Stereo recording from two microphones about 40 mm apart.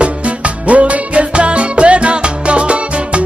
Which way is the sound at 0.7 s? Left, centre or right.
Right.